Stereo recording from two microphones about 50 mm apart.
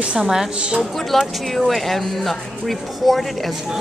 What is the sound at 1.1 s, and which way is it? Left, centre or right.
Speech, centre.